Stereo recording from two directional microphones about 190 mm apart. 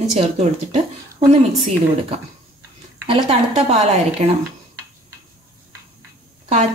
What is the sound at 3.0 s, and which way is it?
A woman's voice, 35° right (ahead or behind).